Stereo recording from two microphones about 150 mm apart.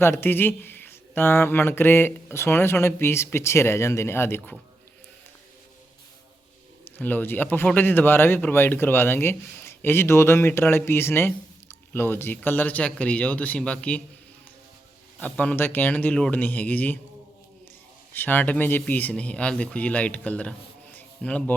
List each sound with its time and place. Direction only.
0.0 s speech: 15° left (ahead or behind)
6.8 s speech: 15° left (ahead or behind)
15.2 s speech: 10° left (ahead or behind)
18.1 s speech: 10° left (ahead or behind)
20.9 s music: 10° left (ahead or behind)